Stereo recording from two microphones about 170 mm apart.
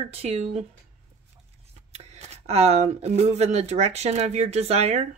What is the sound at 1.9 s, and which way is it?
A woman's voice, 40° right (ahead or behind).